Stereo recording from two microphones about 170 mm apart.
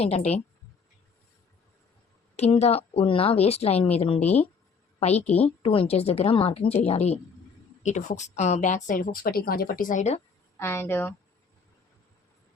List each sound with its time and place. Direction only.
0.0 s speech: 35° left (ahead or behind)
2.3 s a woman's voice: 40° left (ahead or behind)
10.6 s a woman's voice: 15° left (ahead or behind)